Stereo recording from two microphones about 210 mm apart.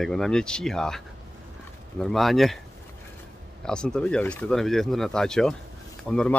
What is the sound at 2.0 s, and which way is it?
Speech, centre (ahead or behind).